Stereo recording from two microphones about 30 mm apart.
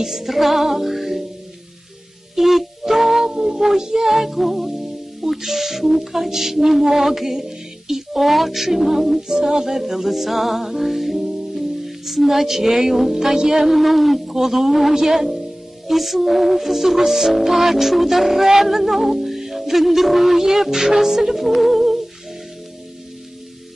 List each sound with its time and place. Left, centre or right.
0.0 s music: centre
2.3 s music: centre
5.3 s a sound: centre
10.7 s music: centre
14.2 s a sound: centre
15.9 s music: centre